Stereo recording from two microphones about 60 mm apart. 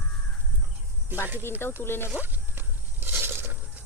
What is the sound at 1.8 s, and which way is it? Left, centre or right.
Speech, left.